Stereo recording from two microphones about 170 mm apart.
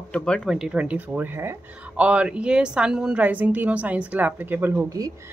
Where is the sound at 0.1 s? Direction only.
5° left (ahead or behind); by 5.1 s 20° right (ahead or behind).